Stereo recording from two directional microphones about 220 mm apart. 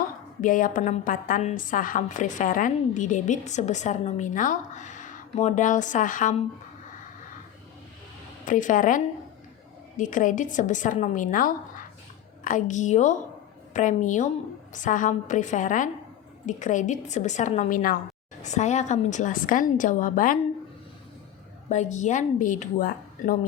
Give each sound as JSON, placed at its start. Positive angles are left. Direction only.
{"t": 0.4, "sound": "a woman's voice", "side_deg": 40}
{"t": 8.4, "sound": "a woman's voice", "side_deg": 35}
{"t": 10.0, "sound": "a woman's voice", "side_deg": 35}
{"t": 21.7, "sound": "a woman's voice", "side_deg": 35}